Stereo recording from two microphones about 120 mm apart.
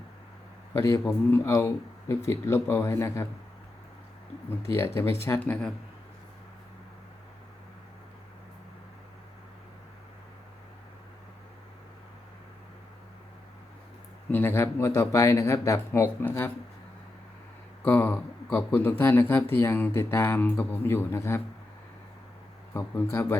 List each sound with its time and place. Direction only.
0.7 s speech: 25° left (ahead or behind)
4.6 s speech: 20° left (ahead or behind)
14.3 s speech: 15° left (ahead or behind)
17.8 s speech: 15° left (ahead or behind)
22.7 s speech: 25° left (ahead or behind)